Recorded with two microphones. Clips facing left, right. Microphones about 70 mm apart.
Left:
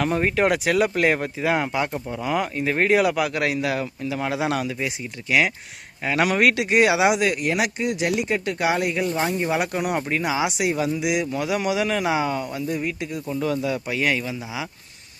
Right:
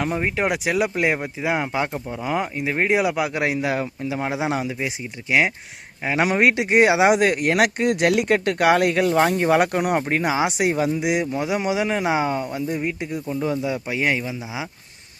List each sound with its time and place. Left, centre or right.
0.0 s speech: centre
2.6 s speech: centre
6.1 s speech: right